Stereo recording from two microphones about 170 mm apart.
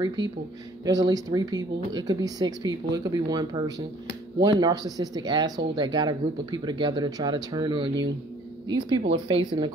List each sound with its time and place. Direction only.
0.0 s speech: 25° right (ahead or behind)